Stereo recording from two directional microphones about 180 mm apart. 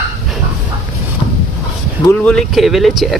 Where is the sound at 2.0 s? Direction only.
5° left (ahead or behind).